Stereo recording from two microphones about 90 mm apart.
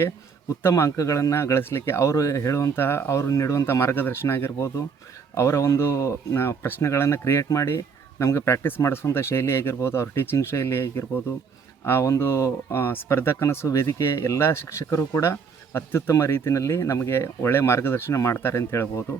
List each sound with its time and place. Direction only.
0.7 s speech: 35° left (ahead or behind)